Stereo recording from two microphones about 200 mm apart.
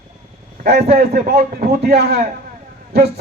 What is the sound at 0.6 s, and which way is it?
A man's voice, 55° right (ahead or behind).